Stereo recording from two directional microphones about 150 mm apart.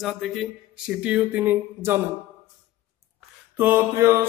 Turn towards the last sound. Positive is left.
turn(degrees=-15)  # may be behind; listen again after turning